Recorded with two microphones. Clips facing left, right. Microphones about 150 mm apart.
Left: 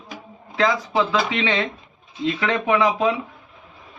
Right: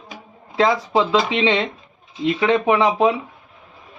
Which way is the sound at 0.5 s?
25° right (ahead or behind).